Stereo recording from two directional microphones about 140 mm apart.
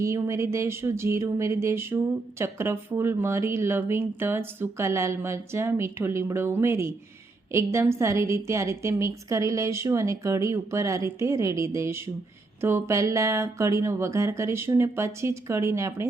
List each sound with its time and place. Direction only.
0.0 s speech: 20° right (ahead or behind)